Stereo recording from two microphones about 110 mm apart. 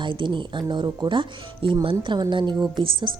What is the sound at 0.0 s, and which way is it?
A woman's voice, 45° right (ahead or behind).